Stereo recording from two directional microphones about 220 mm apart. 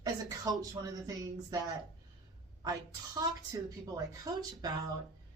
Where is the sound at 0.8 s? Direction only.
15° right (ahead or behind).